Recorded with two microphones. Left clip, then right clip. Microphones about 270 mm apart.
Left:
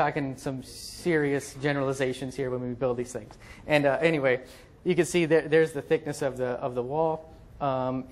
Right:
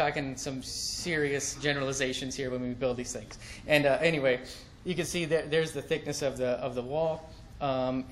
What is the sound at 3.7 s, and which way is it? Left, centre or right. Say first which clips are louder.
Speech: left 2 dB; centre.